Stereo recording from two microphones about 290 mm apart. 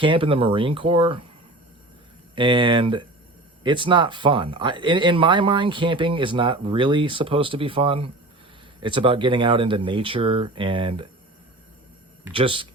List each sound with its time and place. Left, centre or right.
0.0 s speech: centre
2.3 s speech: centre
12.3 s speech: centre